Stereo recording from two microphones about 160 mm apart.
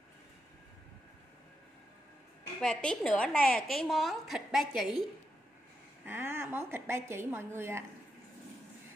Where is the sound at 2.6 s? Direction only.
5° left (ahead or behind).